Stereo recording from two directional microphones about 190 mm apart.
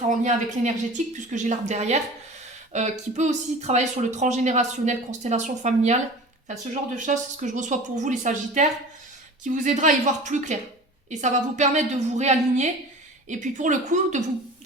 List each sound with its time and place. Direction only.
0.1 s a woman's voice: 40° right (ahead or behind)